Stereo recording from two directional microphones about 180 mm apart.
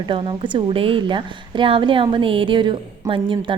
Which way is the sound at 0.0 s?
25° right (ahead or behind).